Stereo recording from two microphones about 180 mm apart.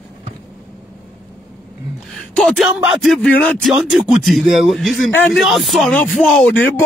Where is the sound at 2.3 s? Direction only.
5° left (ahead or behind).